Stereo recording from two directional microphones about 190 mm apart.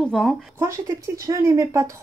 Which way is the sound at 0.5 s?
15° right (ahead or behind).